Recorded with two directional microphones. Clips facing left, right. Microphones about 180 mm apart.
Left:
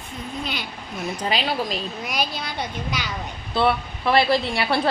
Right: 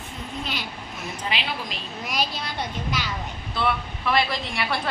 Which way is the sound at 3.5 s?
30° left (ahead or behind).